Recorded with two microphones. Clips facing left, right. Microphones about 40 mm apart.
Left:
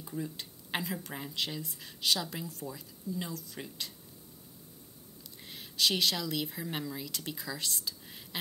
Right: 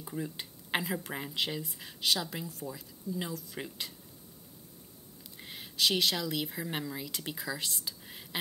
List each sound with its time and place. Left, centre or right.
0.0 s speech: centre
5.4 s a woman's voice: centre